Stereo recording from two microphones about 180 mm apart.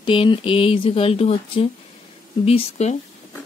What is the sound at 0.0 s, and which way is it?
Speech, 30° left (ahead or behind).